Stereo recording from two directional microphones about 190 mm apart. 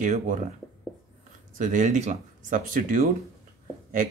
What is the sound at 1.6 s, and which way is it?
Speech, 40° right (ahead or behind).